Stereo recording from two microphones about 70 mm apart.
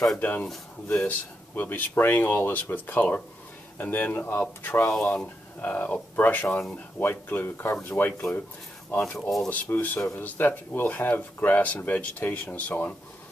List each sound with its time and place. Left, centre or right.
0.2 s speech: left